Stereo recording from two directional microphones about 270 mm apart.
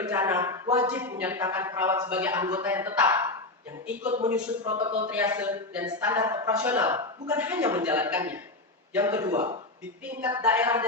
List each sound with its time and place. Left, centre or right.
0.0 s speech: centre; by 5.0 s right
5.0 s speech: centre